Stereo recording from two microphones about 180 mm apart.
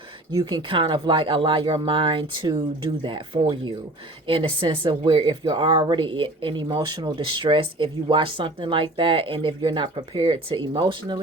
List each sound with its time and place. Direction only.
0.3 s speech: 20° right (ahead or behind)